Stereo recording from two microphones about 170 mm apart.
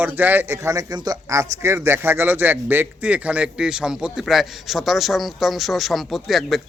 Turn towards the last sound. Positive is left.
turn(degrees=0)  # may be behind; listen again after turning